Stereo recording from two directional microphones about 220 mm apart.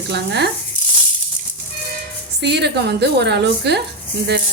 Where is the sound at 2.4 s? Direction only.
50° right (ahead or behind).